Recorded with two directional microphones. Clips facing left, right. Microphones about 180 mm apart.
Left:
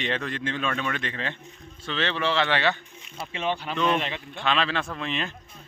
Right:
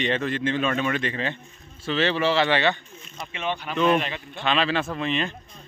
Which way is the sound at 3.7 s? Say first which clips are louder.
Right 6 dB; 5° right (ahead or behind).